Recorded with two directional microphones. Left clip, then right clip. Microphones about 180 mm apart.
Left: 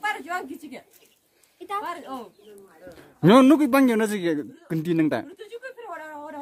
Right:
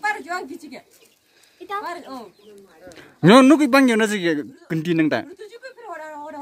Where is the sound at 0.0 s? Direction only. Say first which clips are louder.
Right 3 dB; 50° left (ahead or behind).